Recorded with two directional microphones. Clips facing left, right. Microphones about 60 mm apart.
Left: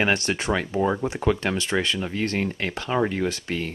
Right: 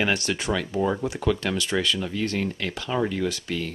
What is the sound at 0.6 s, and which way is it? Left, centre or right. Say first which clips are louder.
Speech: left 1 dB; left.